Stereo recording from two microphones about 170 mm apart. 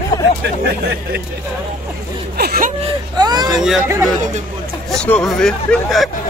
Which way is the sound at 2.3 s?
65° right (ahead or behind).